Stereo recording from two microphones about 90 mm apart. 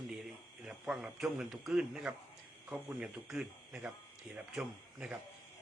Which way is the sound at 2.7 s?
20° right (ahead or behind).